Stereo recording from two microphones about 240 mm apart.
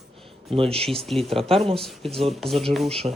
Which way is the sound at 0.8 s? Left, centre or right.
Centre.